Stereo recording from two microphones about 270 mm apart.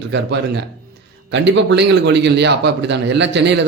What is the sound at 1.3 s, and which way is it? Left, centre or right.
A man's voice, right.